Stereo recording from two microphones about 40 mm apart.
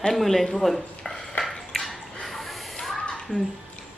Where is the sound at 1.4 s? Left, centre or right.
Left.